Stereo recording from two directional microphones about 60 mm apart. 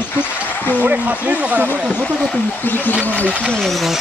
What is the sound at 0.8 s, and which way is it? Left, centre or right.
Speech, right.